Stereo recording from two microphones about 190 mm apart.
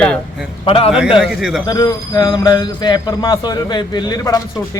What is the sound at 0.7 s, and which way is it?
Speech, 30° left (ahead or behind).